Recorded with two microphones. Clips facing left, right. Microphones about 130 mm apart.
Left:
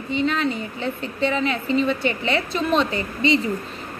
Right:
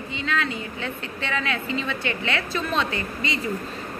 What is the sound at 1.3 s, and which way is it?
A woman's voice, 30° left (ahead or behind).